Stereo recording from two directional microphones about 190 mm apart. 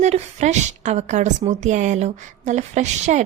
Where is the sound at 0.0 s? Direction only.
35° right (ahead or behind).